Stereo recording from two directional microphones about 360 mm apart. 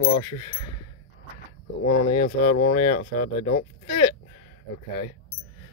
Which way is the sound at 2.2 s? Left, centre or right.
Left.